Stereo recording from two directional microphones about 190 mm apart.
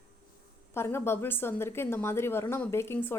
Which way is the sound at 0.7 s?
15° left (ahead or behind).